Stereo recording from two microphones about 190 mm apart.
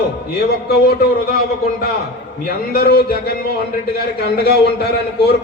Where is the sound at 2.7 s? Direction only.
55° left (ahead or behind).